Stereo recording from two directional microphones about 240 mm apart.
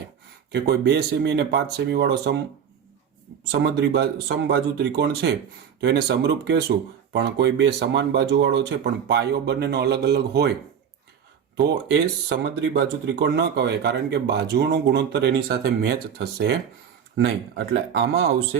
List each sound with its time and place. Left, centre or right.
0.5 s speech: right
3.5 s speech: right
11.5 s speech: right
18.1 s speech: right